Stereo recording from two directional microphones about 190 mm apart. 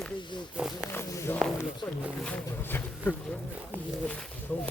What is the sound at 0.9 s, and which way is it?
Speech, 15° left (ahead or behind).